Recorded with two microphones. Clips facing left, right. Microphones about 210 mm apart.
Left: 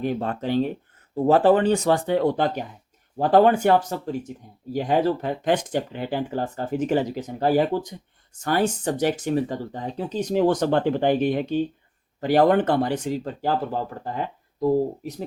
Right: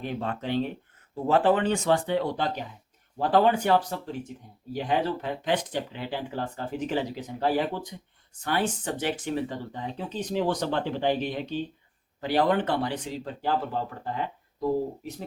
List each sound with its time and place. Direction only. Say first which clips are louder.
0.0 s speech: left 6 dB; 40° left (ahead or behind)